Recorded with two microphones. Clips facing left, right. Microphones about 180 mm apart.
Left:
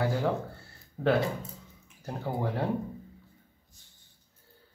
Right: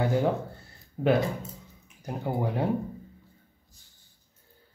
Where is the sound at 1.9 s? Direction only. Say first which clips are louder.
Right 3 dB; 15° right (ahead or behind).